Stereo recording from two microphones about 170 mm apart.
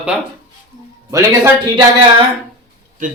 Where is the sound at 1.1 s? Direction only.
15° right (ahead or behind).